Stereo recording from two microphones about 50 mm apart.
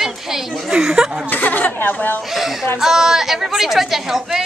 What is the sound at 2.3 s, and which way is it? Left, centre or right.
A woman's voice, centre.